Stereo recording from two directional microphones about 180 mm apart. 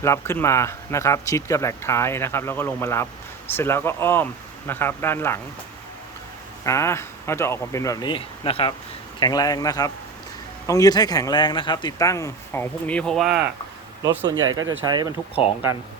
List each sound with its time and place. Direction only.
0.0 s speech: 15° left (ahead or behind)
6.7 s speech: 15° left (ahead or behind); by 8.7 s 30° left (ahead or behind)
9.2 s speech: 20° left (ahead or behind); by 13.5 s centre (ahead or behind)
14.0 s speech: 25° right (ahead or behind)